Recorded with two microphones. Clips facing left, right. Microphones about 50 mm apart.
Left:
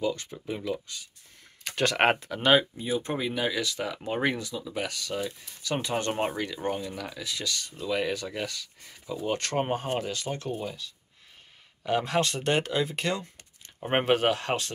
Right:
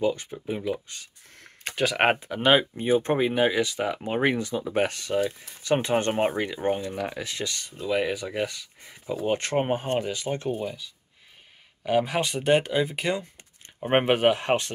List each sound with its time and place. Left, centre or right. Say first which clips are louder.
0.0 s speech: right 4 dB; right
1.0 s speech: even; right
1.8 s speech: right 1 dB; centre
2.1 s speech: right 2 dB; centre
2.7 s speech: right 7 dB; right; by 4.4 s centre
4.4 s speech: right 8 dB; right
6.1 s speech: right 5 dB; right